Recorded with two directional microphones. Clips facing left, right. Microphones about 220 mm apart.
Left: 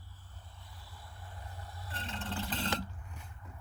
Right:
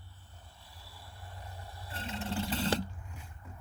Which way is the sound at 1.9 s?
10° right (ahead or behind).